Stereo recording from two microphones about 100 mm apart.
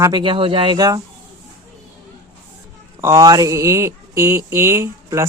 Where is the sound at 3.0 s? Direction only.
25° right (ahead or behind).